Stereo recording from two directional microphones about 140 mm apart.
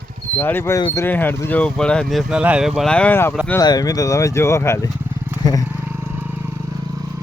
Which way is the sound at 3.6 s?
30° left (ahead or behind).